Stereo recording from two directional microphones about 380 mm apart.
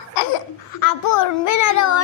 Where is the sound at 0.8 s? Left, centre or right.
Left.